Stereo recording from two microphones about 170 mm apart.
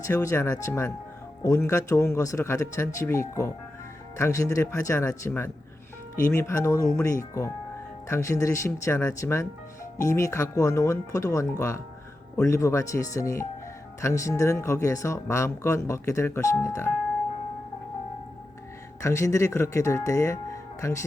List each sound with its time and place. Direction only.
0.0 s speech: 20° left (ahead or behind)
19.0 s speech: 15° left (ahead or behind)